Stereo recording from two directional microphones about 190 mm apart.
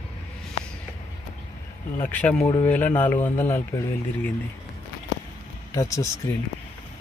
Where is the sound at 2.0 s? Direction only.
10° left (ahead or behind).